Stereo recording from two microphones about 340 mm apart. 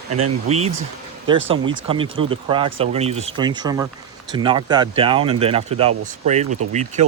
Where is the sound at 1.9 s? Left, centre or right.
Centre.